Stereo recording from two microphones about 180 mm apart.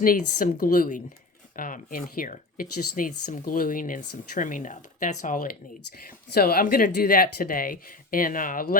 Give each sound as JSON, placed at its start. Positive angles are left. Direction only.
{"t": 0.0, "sound": "speech", "side_deg": 50}